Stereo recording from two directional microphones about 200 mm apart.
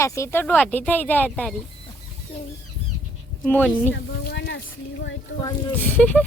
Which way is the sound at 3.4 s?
10° left (ahead or behind).